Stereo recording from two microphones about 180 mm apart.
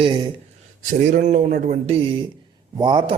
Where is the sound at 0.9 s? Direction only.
45° right (ahead or behind).